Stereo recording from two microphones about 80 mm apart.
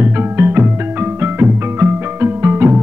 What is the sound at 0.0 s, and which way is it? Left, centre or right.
Music, right.